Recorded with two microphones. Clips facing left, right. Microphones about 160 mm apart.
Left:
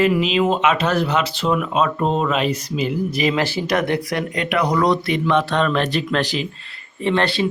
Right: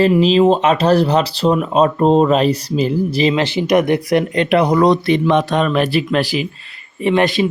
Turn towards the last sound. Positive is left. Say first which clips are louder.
# right 4 dB
turn(degrees=-15)  # may be behind; listen again after turning